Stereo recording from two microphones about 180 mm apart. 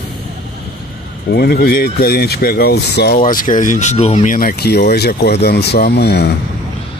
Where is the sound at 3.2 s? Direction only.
50° left (ahead or behind); by 6.3 s 65° left (ahead or behind).